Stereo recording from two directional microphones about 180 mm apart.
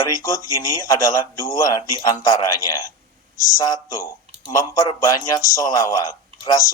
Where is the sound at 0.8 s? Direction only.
20° left (ahead or behind).